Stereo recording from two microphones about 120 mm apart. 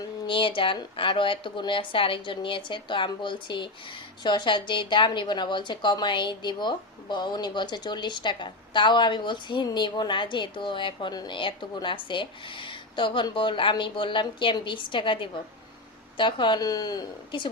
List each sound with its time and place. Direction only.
0.0 s a woman's voice: 45° left (ahead or behind)